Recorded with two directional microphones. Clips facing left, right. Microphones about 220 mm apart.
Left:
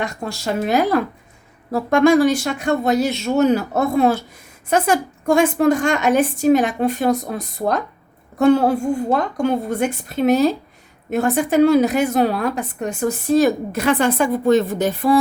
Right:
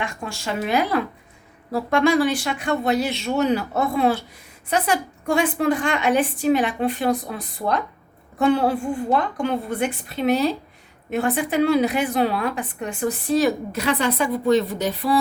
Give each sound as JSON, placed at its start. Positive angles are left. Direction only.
{"t": 0.0, "sound": "a woman's voice", "side_deg": 40}